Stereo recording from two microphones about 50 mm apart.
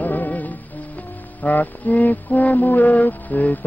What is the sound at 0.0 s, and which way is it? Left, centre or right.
Music, left.